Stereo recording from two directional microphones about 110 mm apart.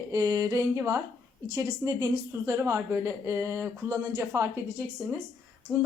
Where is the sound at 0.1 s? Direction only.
35° right (ahead or behind).